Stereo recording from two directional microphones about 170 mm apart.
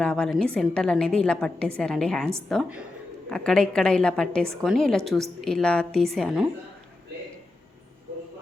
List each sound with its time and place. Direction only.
0.0 s a woman's voice: 5° left (ahead or behind)